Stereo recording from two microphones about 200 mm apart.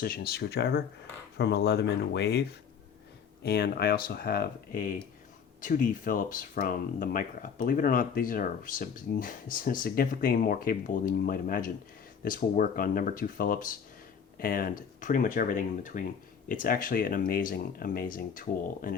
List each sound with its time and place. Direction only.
0.0 s speech: 50° left (ahead or behind)